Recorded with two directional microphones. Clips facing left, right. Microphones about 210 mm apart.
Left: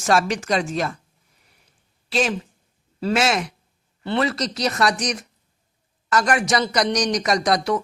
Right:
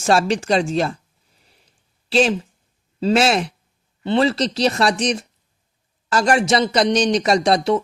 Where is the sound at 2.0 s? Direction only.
30° right (ahead or behind).